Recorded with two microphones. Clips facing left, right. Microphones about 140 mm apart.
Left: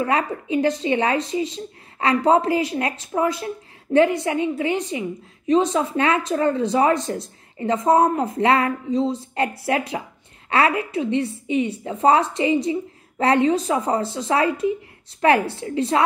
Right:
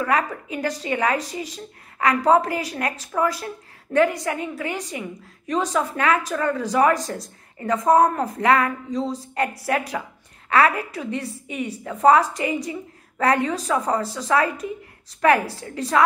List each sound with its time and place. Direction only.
0.0 s a woman's voice: 25° left (ahead or behind)